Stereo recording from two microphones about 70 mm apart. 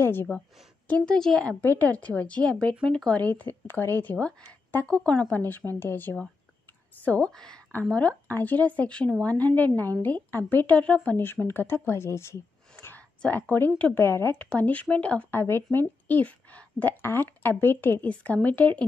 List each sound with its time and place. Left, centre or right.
0.0 s a woman's voice: left
0.8 s a woman's voice: centre
1.6 s a woman's voice: left
5.7 s a woman's voice: left
7.3 s speech: centre
8.3 s a woman's voice: left
11.4 s speech: left
13.2 s a woman's voice: left
14.4 s a woman's voice: left
15.3 s speech: left
16.1 s a woman's voice: left